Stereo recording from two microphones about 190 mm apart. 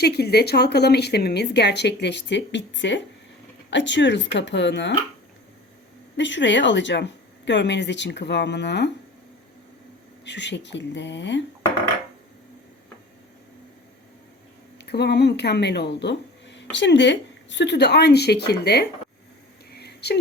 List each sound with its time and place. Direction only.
0.0 s speech: 55° left (ahead or behind)
6.1 s speech: 70° left (ahead or behind)
10.2 s speech: 65° left (ahead or behind)
14.8 s speech: 60° left (ahead or behind)
19.7 s a sound: 60° left (ahead or behind)